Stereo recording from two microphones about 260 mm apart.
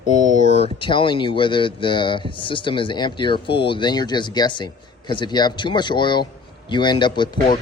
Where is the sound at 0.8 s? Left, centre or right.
Centre.